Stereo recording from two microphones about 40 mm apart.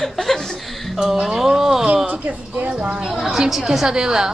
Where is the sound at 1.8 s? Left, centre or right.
Right.